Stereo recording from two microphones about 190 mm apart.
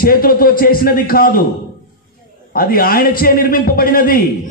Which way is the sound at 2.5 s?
50° left (ahead or behind).